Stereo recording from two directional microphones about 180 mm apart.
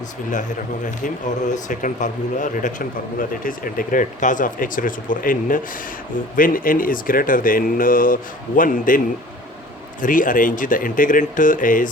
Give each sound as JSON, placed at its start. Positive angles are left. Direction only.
{"t": 0.9, "sound": "speech", "side_deg": 45}
{"t": 10.0, "sound": "speech", "side_deg": 50}